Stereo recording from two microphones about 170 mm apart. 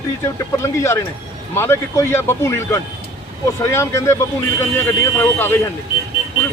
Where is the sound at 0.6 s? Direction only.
15° left (ahead or behind).